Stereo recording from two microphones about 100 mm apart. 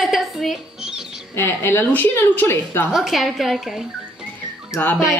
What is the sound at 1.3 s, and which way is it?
A woman's voice, 25° left (ahead or behind).